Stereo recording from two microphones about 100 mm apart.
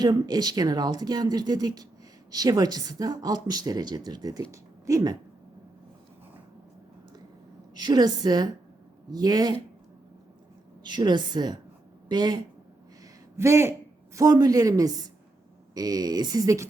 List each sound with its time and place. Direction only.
0.0 s speech: 40° right (ahead or behind)
7.8 s a woman's voice: 45° right (ahead or behind)
10.8 s a woman's voice: 45° right (ahead or behind)
13.3 s speech: 30° right (ahead or behind)
14.2 s speech: 40° right (ahead or behind)